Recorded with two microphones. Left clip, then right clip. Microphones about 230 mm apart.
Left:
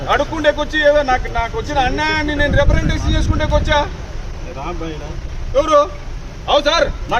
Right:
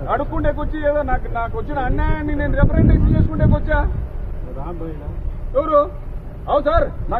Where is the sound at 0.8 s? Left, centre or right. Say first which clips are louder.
Left 6 dB; left.